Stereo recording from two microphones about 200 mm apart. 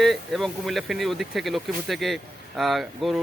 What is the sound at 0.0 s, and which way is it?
Speech, centre (ahead or behind).